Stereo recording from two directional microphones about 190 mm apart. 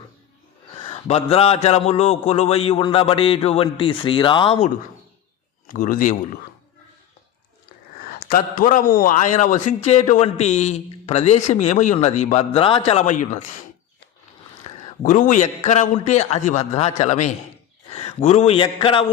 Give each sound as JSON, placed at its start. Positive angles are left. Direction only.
{"t": 0.9, "sound": "a man's voice", "side_deg": 35}
{"t": 5.6, "sound": "a man's voice", "side_deg": 45}
{"t": 8.0, "sound": "a man's voice", "side_deg": 45}
{"t": 14.7, "sound": "a sound", "side_deg": 35}
{"t": 15.0, "sound": "a man's voice", "side_deg": 40}